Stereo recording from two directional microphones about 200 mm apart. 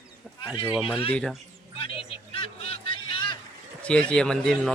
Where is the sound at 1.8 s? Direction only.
25° left (ahead or behind).